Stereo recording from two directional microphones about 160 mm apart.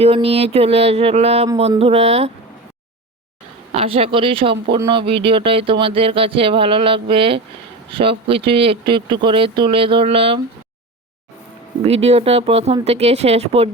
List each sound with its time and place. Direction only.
0.0 s speech: 40° right (ahead or behind)
3.7 s speech: 35° right (ahead or behind)
11.8 s speech: 40° right (ahead or behind)